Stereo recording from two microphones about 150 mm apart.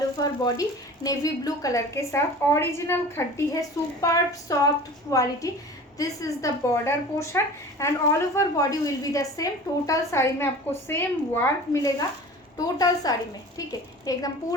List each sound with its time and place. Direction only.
0.2 s speech: 25° left (ahead or behind)